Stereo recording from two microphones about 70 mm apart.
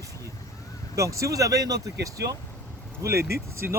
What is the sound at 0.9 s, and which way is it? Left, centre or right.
Speech, right.